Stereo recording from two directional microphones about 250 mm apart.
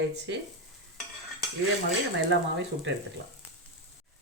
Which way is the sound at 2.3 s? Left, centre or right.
Right.